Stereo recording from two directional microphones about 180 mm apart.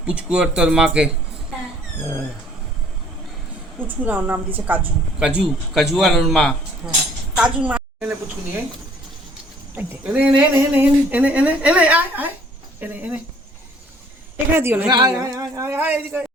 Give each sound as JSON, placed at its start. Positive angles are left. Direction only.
{"t": 0.0, "sound": "a woman's voice", "side_deg": -5}
{"t": 3.8, "sound": "a woman's voice", "side_deg": -10}
{"t": 7.3, "sound": "a sound", "side_deg": -5}
{"t": 9.7, "sound": "speech", "side_deg": -10}
{"t": 14.5, "sound": "speech", "side_deg": -10}
{"t": 14.8, "sound": "a woman's voice", "side_deg": -25}